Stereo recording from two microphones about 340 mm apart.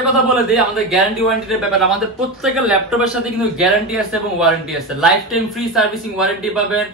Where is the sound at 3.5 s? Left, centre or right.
Centre.